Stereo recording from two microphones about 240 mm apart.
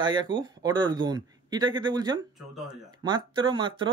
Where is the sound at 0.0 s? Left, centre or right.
Centre.